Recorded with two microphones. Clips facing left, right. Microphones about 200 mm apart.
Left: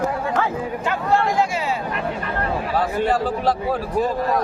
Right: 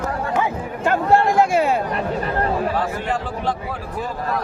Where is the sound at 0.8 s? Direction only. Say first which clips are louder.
Right 5 dB; 50° right (ahead or behind).